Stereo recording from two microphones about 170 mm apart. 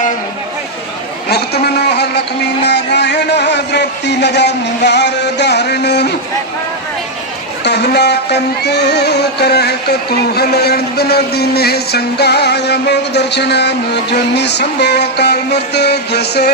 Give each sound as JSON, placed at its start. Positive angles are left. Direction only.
{"t": 1.3, "sound": "a man's voice", "side_deg": 75}
{"t": 7.6, "sound": "music", "side_deg": 80}